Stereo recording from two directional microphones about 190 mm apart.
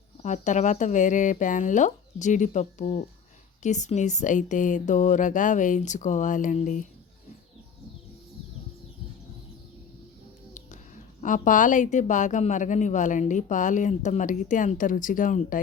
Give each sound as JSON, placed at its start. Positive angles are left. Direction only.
{"t": 0.2, "sound": "a woman's voice", "side_deg": 40}
{"t": 11.2, "sound": "a woman's voice", "side_deg": 40}